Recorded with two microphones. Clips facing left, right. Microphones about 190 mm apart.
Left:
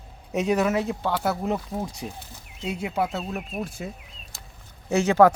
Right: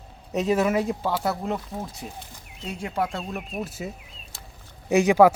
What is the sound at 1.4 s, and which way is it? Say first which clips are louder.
Speech: left 2 dB; 10° left (ahead or behind).